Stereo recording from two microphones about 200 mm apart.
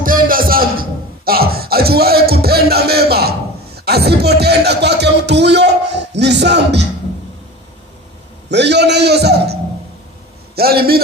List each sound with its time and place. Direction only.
0.0 s a sound: 45° right (ahead or behind)
3.8 s speech: 55° right (ahead or behind)
8.4 s a man's voice: 60° right (ahead or behind)